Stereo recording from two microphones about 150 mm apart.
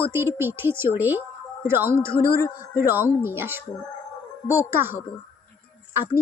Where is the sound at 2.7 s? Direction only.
15° right (ahead or behind).